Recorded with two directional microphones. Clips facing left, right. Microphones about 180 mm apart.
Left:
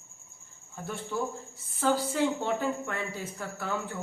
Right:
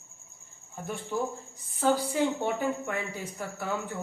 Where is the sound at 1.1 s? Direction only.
15° right (ahead or behind).